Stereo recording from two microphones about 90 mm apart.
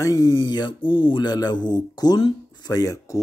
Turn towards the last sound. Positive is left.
turn(degrees=35)  # may be behind; listen again after turning